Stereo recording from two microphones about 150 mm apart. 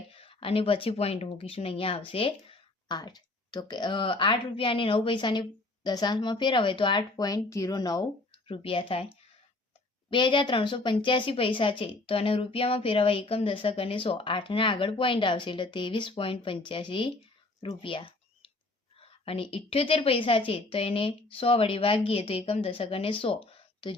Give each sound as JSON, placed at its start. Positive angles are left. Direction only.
{"t": 0.1, "sound": "a woman's voice", "side_deg": 40}
{"t": 10.1, "sound": "speech", "side_deg": 35}
{"t": 17.6, "sound": "a sound", "side_deg": 35}
{"t": 18.9, "sound": "speech", "side_deg": 40}